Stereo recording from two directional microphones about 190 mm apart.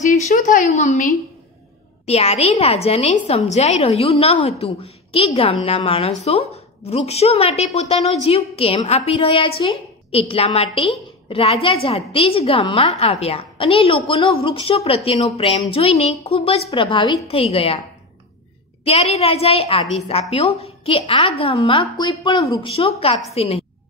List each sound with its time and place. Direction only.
0.0 s a woman's voice: 40° left (ahead or behind)
18.9 s a woman's voice: 35° left (ahead or behind)